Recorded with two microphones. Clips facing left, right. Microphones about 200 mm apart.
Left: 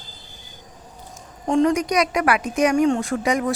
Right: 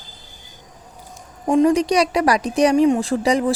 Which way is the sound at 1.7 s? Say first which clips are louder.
Right 3 dB; 30° right (ahead or behind).